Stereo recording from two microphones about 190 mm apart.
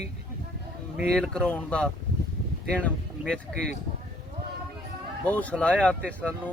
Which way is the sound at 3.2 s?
5° left (ahead or behind).